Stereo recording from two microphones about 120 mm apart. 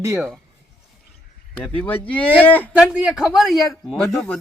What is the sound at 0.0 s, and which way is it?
Speech, 20° right (ahead or behind).